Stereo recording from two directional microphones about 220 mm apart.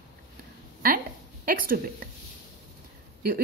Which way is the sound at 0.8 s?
40° right (ahead or behind).